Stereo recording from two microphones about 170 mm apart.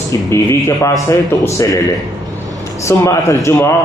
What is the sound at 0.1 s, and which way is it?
A man's voice, 15° left (ahead or behind).